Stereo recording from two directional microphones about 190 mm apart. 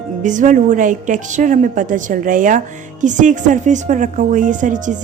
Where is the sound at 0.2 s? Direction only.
40° right (ahead or behind).